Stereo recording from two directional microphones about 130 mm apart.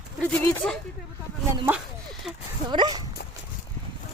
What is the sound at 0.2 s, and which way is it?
Speech, 10° left (ahead or behind).